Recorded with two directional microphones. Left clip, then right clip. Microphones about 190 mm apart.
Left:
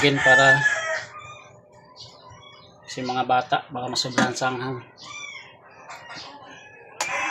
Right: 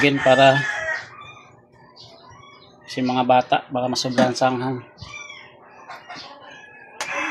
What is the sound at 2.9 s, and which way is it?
Speech, 25° right (ahead or behind).